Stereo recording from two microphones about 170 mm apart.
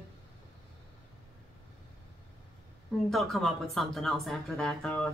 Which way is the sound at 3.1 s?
Centre (ahead or behind).